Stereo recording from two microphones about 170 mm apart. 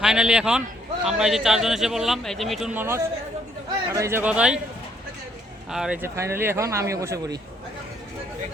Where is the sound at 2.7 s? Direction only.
15° right (ahead or behind).